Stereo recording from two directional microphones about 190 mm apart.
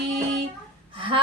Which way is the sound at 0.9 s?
25° right (ahead or behind).